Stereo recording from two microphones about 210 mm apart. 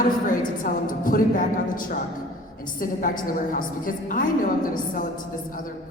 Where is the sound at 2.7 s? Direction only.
40° left (ahead or behind).